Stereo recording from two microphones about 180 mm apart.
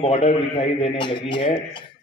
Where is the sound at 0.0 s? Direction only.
35° left (ahead or behind).